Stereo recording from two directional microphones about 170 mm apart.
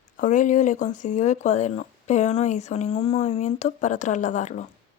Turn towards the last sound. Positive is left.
turn(degrees=45)  # may be behind; listen again after turning